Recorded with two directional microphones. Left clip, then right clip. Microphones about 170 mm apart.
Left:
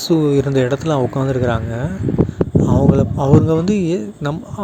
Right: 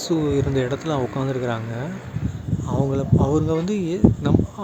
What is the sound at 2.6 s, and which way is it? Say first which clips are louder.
Speech: left 5 dB; 35° left (ahead or behind).